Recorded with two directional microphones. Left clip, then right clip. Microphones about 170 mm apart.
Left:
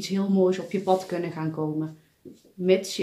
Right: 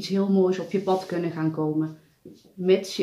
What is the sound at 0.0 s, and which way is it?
Speech, 30° left (ahead or behind).